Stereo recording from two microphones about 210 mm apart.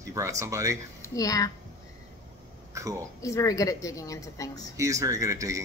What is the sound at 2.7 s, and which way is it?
Speech, 15° right (ahead or behind).